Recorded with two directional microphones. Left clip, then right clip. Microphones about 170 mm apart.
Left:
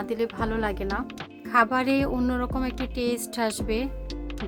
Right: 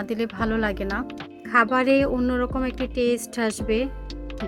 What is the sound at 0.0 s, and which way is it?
Speech, 15° right (ahead or behind).